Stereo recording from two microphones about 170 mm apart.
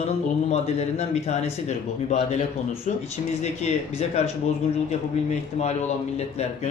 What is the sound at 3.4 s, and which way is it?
Speech, 40° left (ahead or behind).